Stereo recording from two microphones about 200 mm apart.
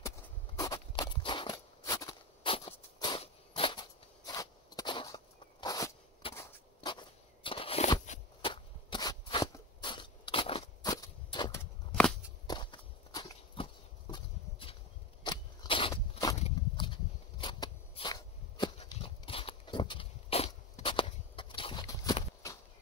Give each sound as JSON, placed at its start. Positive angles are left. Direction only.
{"t": 0.6, "sound": "a sound", "side_deg": 20}
{"t": 12.4, "sound": "walk", "side_deg": 20}
{"t": 14.1, "sound": "horse", "side_deg": 25}
{"t": 15.2, "sound": "scrape", "side_deg": 25}
{"t": 15.9, "sound": "walk", "side_deg": 15}
{"t": 16.3, "sound": "a sound", "side_deg": 30}